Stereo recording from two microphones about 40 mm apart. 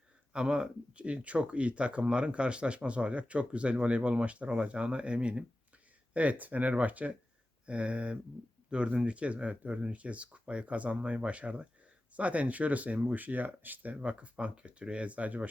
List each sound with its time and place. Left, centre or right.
0.3 s speech: right
6.1 s speech: right
13.9 s speech: right